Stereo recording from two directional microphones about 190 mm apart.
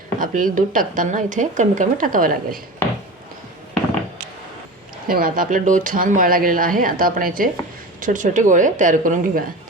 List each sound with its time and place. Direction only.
0.2 s speech: 45° right (ahead or behind)
5.0 s speech: 50° right (ahead or behind)